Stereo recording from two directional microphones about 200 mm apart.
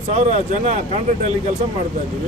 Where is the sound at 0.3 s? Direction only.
35° right (ahead or behind).